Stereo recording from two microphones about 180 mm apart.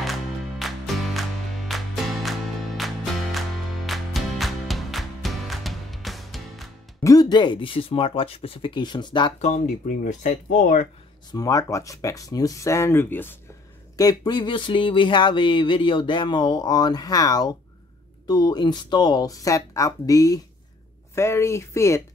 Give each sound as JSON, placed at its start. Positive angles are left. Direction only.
{"t": 0.0, "sound": "music", "side_deg": 0}
{"t": 7.0, "sound": "speech", "side_deg": 20}
{"t": 9.4, "sound": "speech", "side_deg": 40}
{"t": 11.3, "sound": "speech", "side_deg": 20}
{"t": 13.9, "sound": "speech", "side_deg": 20}